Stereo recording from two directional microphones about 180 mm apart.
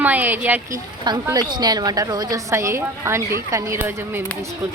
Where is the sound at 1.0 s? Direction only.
20° right (ahead or behind).